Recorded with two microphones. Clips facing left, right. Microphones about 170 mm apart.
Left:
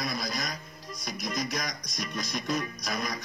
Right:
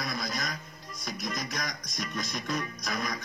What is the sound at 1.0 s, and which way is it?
Speech, 20° left (ahead or behind).